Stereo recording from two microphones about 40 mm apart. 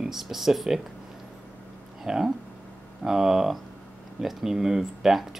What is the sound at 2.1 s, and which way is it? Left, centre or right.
Speech, centre.